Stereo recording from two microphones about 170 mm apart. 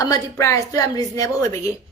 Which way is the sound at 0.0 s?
20° left (ahead or behind).